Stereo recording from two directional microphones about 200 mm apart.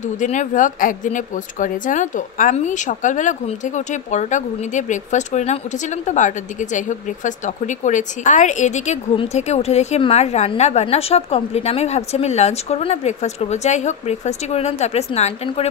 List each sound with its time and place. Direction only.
0.0 s speech: 40° left (ahead or behind)